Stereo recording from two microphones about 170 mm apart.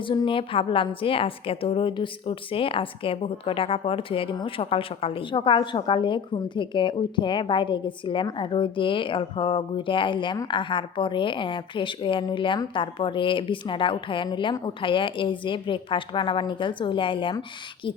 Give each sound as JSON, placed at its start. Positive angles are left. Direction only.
{"t": 0.0, "sound": "a woman's voice", "side_deg": 30}